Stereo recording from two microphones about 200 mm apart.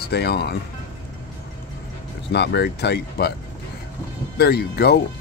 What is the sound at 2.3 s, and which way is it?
Speech, 55° left (ahead or behind).